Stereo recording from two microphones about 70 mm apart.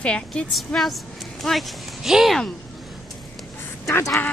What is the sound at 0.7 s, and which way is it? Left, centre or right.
Speech, centre.